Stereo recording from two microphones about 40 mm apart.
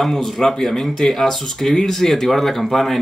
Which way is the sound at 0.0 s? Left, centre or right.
Centre.